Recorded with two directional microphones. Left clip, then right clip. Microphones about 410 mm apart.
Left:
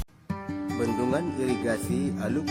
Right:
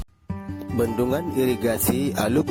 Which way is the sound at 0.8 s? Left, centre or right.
Right.